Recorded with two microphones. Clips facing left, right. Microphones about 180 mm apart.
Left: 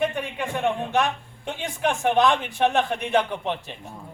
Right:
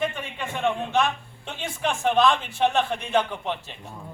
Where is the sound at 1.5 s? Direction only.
15° left (ahead or behind).